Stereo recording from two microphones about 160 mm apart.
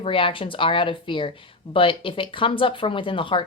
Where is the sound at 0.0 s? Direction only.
35° left (ahead or behind).